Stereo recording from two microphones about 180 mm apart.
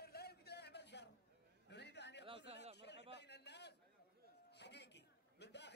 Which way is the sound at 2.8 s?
70° left (ahead or behind).